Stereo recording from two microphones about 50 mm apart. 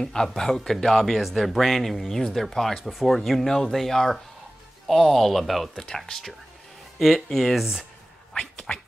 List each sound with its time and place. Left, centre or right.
0.0 s speech: centre
5.9 s speech: centre
8.7 s a sound: left